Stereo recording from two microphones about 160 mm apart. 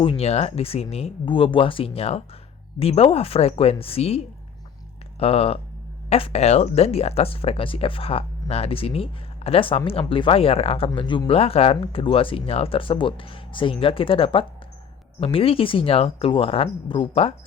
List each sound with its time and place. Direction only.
0.0 s speech: 35° left (ahead or behind)
5.2 s speech: 40° left (ahead or behind)